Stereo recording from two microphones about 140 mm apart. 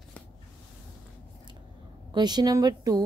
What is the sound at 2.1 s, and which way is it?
Speech, 30° right (ahead or behind).